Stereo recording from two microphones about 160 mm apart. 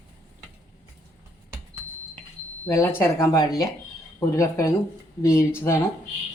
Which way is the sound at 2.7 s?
15° left (ahead or behind).